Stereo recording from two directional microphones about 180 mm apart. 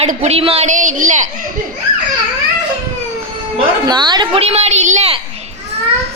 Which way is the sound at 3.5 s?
25° right (ahead or behind).